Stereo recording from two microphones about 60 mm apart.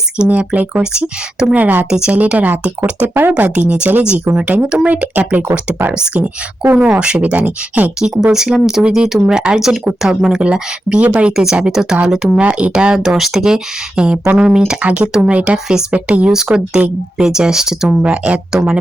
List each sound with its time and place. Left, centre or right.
0.3 s speech: right
1.0 s speech: centre
1.5 s speech: right
6.1 s speech: right
6.7 s speech: centre
12.4 s speech: right
13.1 s speech: centre
14.8 s speech: right
16.3 s speech: centre
18.0 s speech: centre